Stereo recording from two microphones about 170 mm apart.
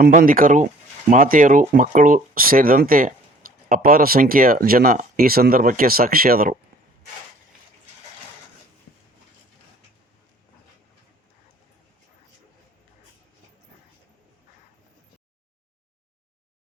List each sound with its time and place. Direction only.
0.0 s speech: 55° right (ahead or behind)